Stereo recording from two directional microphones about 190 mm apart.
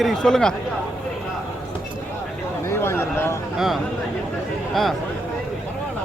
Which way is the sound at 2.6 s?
15° left (ahead or behind).